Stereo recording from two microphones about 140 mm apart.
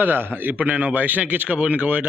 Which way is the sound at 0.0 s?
15° right (ahead or behind).